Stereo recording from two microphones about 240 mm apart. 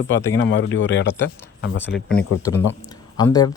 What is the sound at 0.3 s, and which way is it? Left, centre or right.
Speech, left.